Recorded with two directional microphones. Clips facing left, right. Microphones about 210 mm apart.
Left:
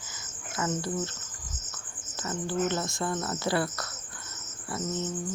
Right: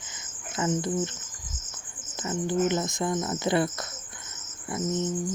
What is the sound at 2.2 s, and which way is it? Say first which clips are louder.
Speech: right 4 dB; 15° right (ahead or behind).